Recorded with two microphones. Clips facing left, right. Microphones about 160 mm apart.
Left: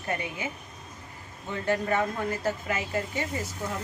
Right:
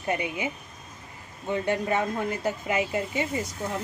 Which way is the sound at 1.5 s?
15° right (ahead or behind).